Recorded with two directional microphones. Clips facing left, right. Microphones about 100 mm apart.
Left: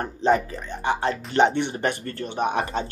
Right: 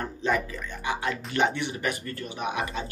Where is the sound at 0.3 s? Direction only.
35° left (ahead or behind).